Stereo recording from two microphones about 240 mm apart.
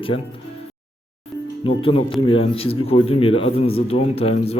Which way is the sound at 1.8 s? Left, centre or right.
Left.